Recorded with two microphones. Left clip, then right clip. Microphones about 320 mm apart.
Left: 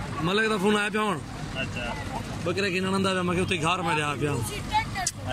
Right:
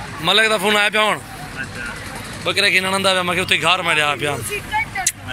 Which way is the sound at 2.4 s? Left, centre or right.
Centre.